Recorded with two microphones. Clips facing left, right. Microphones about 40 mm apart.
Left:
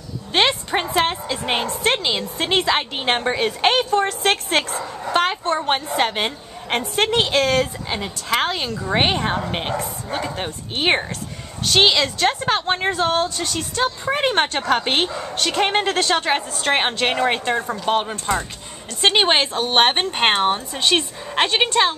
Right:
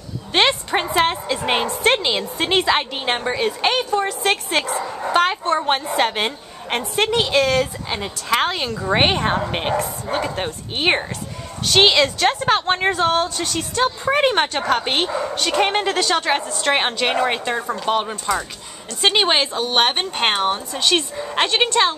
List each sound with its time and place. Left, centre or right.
0.3 s a woman's voice: centre
3.0 s a woman's voice: centre; by 4.6 s left
5.1 s a woman's voice: centre
7.2 s a woman's voice: centre
7.9 s a woman's voice: centre
10.8 s a woman's voice: centre
19.5 s speech: left
20.0 s a woman's voice: centre